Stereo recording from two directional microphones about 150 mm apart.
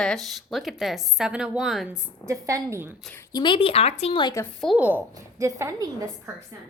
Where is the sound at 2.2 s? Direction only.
20° right (ahead or behind).